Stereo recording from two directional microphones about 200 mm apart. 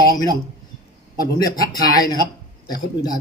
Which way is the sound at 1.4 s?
20° left (ahead or behind).